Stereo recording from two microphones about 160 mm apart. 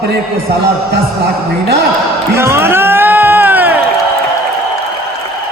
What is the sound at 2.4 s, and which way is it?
Music, 15° right (ahead or behind).